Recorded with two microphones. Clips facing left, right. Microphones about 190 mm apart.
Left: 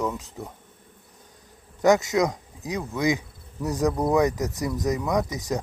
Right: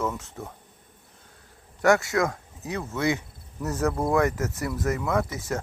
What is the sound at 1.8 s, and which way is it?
Speech, 20° left (ahead or behind).